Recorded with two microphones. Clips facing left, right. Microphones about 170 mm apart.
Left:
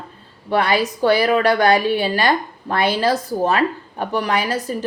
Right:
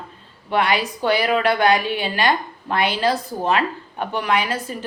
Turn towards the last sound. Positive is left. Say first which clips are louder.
# left 3 dB
turn(degrees=40)  # may be behind; listen again after turning